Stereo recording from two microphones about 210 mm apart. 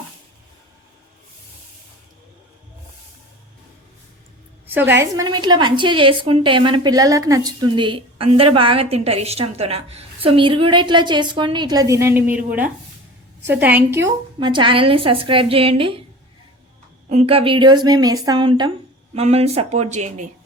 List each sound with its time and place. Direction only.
4.6 s a woman's voice: 10° right (ahead or behind)
14.3 s a woman's voice: 20° right (ahead or behind)
17.1 s a woman's voice: 30° right (ahead or behind)